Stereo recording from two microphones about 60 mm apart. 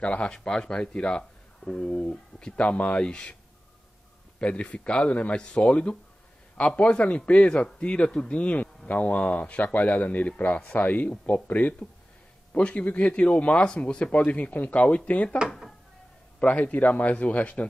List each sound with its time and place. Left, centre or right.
0.0 s speech: centre
4.4 s a man's voice: centre
16.3 s a man's voice: left